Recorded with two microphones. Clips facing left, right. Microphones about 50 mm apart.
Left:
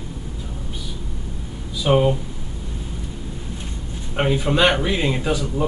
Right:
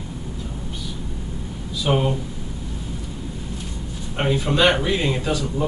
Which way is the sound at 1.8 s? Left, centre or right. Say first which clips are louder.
Left 4 dB; centre.